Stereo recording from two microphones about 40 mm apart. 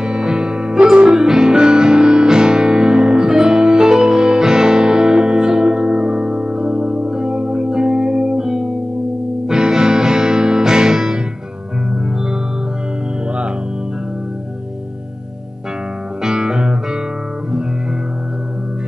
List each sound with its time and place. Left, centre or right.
0.0 s music: centre
16.2 s music: centre